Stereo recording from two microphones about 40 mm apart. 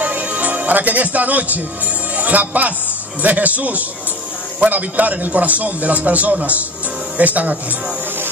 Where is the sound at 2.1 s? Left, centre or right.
Right.